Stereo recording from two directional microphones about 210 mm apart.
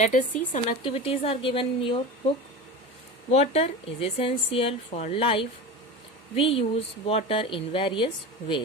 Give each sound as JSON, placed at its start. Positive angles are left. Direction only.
{"t": 0.0, "sound": "a woman's voice", "side_deg": 35}
{"t": 3.3, "sound": "a woman's voice", "side_deg": 30}